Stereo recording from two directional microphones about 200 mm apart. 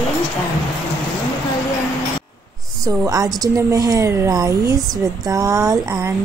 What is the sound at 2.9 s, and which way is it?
A woman's voice, 15° right (ahead or behind).